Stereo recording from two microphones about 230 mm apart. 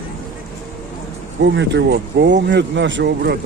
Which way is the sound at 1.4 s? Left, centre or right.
Right.